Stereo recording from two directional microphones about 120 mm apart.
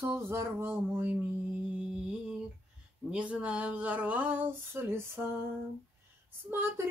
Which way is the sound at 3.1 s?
10° right (ahead or behind).